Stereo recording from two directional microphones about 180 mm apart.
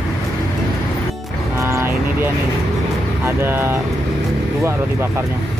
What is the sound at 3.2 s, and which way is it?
Speech, 10° right (ahead or behind).